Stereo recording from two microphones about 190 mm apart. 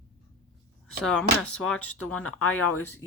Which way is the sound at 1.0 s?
5° left (ahead or behind).